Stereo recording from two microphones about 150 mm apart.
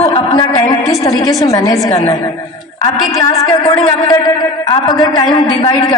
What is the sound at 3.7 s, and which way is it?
A man's voice, 30° left (ahead or behind).